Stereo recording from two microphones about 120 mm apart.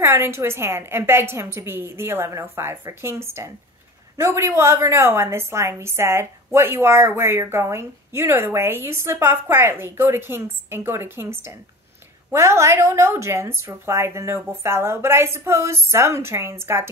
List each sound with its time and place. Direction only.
0.0 s a woman's voice: 20° right (ahead or behind)